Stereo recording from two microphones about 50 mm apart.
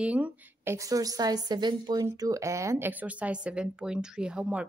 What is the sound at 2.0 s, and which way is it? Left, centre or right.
Speech, right.